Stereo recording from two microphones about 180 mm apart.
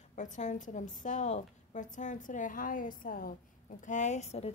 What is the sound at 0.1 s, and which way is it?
A woman's voice, 45° left (ahead or behind).